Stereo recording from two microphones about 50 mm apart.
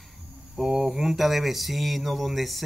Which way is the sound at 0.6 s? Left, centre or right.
Centre.